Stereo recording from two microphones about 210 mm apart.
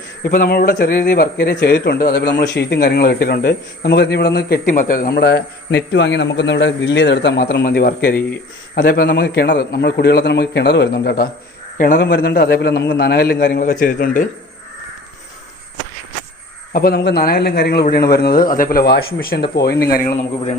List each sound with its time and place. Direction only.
0.2 s a man's voice: 45° left (ahead or behind)
16.7 s a man's voice: 45° left (ahead or behind)